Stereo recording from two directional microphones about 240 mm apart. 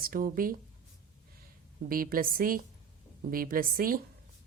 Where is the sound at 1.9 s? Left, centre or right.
Right.